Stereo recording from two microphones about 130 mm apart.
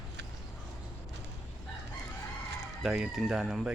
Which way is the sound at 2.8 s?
Centre (ahead or behind).